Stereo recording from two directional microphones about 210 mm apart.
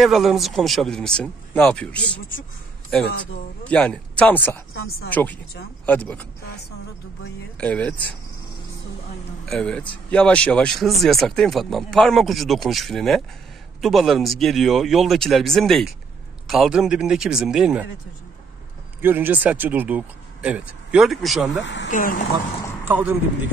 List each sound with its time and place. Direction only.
0.0 s speech: centre (ahead or behind)
3.6 s speech: 5° left (ahead or behind)
7.6 s speech: 5° left (ahead or behind)
9.5 s speech: 5° left (ahead or behind)
18.9 s speech: 10° right (ahead or behind)
21.5 s speech: 60° left (ahead or behind)
21.9 s speech: 40° left (ahead or behind)
22.8 s speech: 10° right (ahead or behind)